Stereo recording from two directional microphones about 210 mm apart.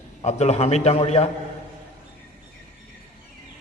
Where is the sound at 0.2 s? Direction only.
30° left (ahead or behind).